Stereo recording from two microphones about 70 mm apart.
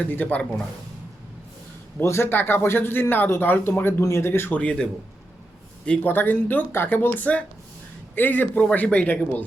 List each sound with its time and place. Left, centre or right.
0.0 s a man's voice: left
2.0 s speech: left
4.5 s a man's voice: centre
6.1 s a man's voice: left